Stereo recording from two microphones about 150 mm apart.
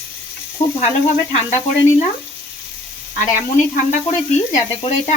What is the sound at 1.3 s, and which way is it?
Speech, 45° left (ahead or behind).